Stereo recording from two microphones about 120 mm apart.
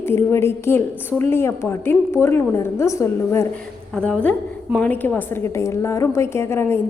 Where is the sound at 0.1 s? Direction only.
20° left (ahead or behind).